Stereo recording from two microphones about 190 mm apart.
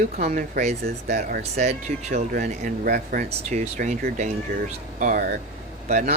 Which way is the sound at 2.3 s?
45° right (ahead or behind).